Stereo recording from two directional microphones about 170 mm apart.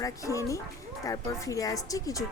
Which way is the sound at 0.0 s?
20° left (ahead or behind).